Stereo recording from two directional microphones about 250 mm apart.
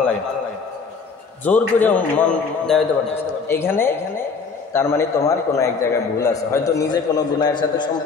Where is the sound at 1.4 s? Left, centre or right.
Centre.